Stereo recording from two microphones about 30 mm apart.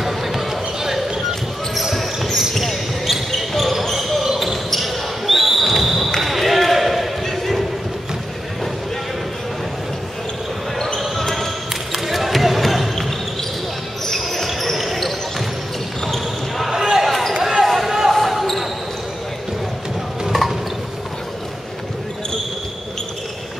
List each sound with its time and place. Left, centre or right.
0.0 s basketball bounce: centre
2.6 s basketball bounce: centre
7.2 s a sound: centre
11.1 s basketball bounce: centre
12.1 s basketball bounce: centre
14.1 s basketball bounce: centre
16.7 s basketball bounce: centre
17.0 s basketball bounce: centre
17.3 s basketball bounce: centre
18.1 s basketball bounce: centre
20.2 s a sound: centre